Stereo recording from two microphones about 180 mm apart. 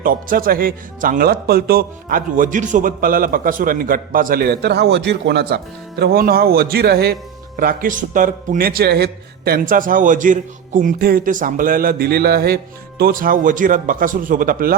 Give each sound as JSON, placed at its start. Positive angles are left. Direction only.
{"t": 0.0, "sound": "speech", "side_deg": -50}
{"t": 6.0, "sound": "a man's voice", "side_deg": -60}